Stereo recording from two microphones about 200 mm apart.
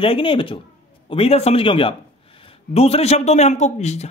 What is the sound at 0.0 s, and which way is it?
A man's voice, 25° left (ahead or behind).